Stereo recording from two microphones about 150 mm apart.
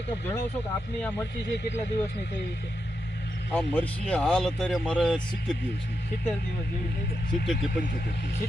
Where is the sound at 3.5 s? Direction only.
10° left (ahead or behind).